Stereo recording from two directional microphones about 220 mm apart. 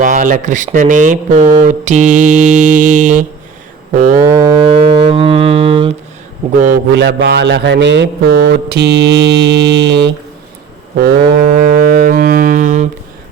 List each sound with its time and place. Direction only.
0.0 s speech: 35° right (ahead or behind)
4.2 s livestock: 15° right (ahead or behind)
6.6 s speech: 40° right (ahead or behind)
7.0 s music: 45° right (ahead or behind)
11.0 s a sound: 45° right (ahead or behind)